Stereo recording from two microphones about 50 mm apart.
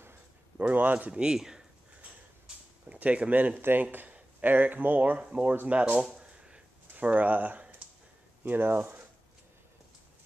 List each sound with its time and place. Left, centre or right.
0.6 s speech: right
1.1 s speech: centre
2.0 s a sound: right
3.8 s speech: right
6.1 s a sound: right
7.0 s speech: right